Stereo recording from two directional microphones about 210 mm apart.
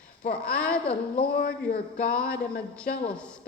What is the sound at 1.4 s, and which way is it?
Speech, 35° left (ahead or behind).